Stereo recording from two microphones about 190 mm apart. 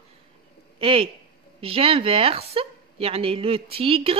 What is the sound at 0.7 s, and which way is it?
A woman's voice, 30° right (ahead or behind).